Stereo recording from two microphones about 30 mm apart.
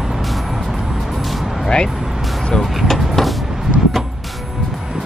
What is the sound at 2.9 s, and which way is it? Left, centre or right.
Vehicle, centre.